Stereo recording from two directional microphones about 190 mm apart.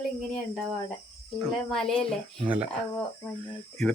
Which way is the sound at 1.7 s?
5° left (ahead or behind).